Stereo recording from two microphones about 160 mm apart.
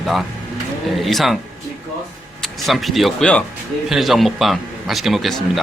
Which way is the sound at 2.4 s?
Centre (ahead or behind).